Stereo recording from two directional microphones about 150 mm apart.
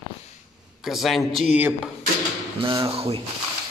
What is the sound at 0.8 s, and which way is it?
Speech, centre (ahead or behind).